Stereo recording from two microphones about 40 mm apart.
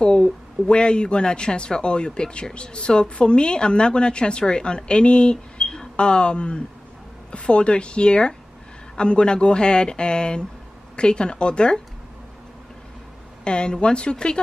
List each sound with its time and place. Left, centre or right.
0.0 s a woman's voice: left
13.4 s a woman's voice: left